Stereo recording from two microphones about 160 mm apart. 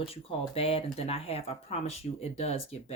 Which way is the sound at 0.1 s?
35° left (ahead or behind).